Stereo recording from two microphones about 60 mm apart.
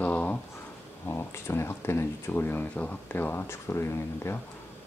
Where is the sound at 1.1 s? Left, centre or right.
Left.